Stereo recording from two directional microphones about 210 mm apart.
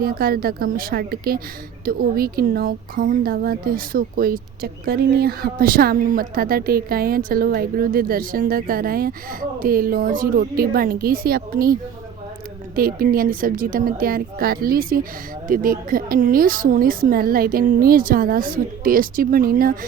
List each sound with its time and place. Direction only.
0.0 s speech: 45° right (ahead or behind)